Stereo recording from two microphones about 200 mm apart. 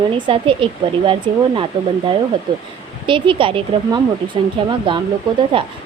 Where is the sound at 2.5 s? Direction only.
25° right (ahead or behind).